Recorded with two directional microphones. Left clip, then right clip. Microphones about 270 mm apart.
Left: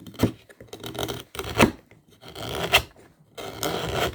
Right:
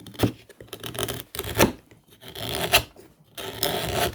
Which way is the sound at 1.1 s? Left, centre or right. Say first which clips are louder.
Left 1 dB; centre.